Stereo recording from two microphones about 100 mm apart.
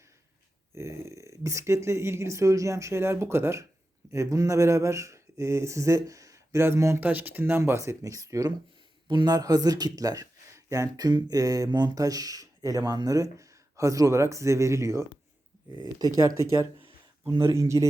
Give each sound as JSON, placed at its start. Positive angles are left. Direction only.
{"t": 0.7, "sound": "speech", "side_deg": -25}
{"t": 9.0, "sound": "speech", "side_deg": -45}
{"t": 15.8, "sound": "speech", "side_deg": -40}